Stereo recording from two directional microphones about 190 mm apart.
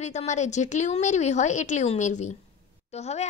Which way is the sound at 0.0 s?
35° left (ahead or behind).